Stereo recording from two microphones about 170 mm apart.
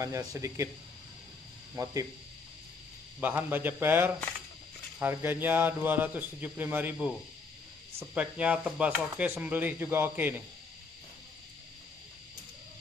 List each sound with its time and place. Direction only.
0.0 s speech: 20° right (ahead or behind)
1.8 s speech: 25° right (ahead or behind)
3.2 s speech: 10° right (ahead or behind)